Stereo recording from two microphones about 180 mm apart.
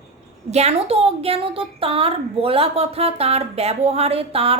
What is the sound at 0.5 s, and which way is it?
A woman's voice, 35° right (ahead or behind).